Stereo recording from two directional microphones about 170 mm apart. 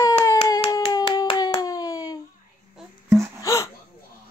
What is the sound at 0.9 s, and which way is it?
Hands, 25° left (ahead or behind).